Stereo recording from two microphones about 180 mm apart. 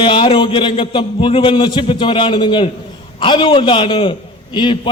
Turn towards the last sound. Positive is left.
turn(degrees=25)  # may be behind; listen again after turning